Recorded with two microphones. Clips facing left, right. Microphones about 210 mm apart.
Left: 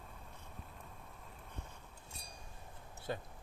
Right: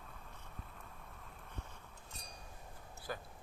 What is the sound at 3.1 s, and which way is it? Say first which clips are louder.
Speech: left 3 dB; 25° left (ahead or behind).